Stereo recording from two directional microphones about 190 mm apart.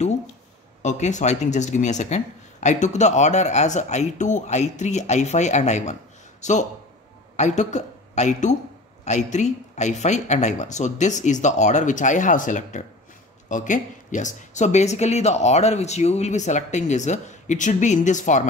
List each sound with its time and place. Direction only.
0.8 s a woman's voice: 40° left (ahead or behind)